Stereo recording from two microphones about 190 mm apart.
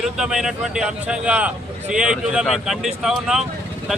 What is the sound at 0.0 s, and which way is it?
A man's voice, centre (ahead or behind).